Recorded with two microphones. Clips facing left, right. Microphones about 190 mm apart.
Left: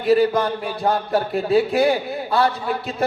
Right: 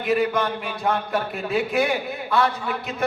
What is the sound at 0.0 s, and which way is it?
Speech, 35° left (ahead or behind).